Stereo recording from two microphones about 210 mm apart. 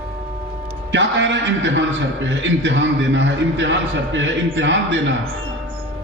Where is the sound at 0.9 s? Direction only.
60° right (ahead or behind).